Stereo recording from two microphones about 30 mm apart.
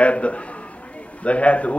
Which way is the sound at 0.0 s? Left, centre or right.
Left.